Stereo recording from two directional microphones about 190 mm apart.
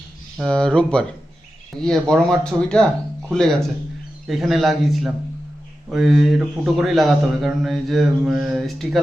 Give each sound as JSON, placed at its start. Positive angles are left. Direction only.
{"t": 0.3, "sound": "a man's voice", "side_deg": 5}